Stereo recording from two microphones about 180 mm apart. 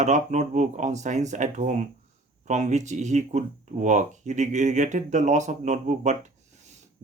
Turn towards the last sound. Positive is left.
turn(degrees=-40)  # may be behind; listen again after turning